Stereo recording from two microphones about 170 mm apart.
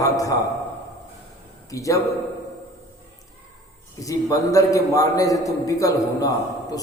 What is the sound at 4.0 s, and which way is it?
A man's voice, 20° left (ahead or behind).